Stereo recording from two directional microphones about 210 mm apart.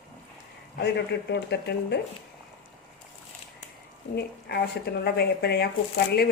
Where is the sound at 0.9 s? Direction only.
55° left (ahead or behind).